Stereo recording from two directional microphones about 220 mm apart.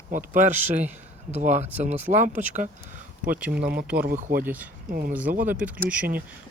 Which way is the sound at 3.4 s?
5° right (ahead or behind).